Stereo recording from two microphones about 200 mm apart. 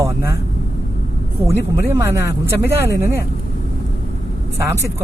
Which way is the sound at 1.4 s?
15° right (ahead or behind).